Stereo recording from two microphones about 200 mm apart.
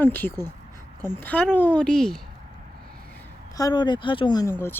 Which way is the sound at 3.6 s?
20° left (ahead or behind).